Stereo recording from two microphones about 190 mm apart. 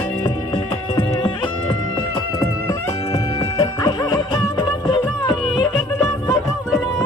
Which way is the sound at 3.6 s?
20° left (ahead or behind).